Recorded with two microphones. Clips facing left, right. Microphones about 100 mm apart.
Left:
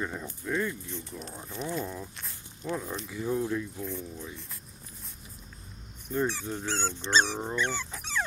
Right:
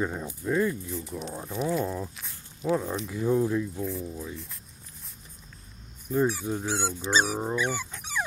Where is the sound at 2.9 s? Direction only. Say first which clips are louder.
Right 5 dB; 5° right (ahead or behind).